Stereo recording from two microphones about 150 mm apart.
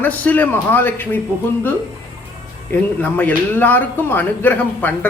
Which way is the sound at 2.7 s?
10° left (ahead or behind).